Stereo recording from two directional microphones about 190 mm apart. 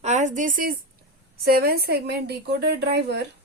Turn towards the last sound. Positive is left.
turn(degrees=-60)  # may be behind; listen again after turning